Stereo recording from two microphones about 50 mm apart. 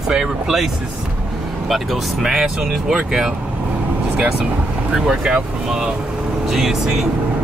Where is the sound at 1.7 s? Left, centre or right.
Centre.